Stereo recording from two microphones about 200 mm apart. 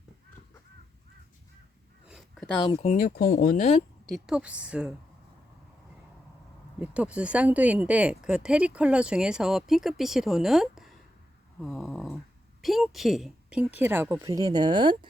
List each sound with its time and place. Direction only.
2.0 s a sound: centre (ahead or behind)
2.6 s speech: 35° left (ahead or behind)
4.0 s speech: centre (ahead or behind)
6.7 s speech: 5° right (ahead or behind)
11.6 s a sound: centre (ahead or behind)
12.6 s speech: centre (ahead or behind); by 14.9 s 25° right (ahead or behind)